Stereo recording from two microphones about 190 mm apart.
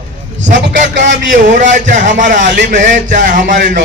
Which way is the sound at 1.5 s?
40° right (ahead or behind).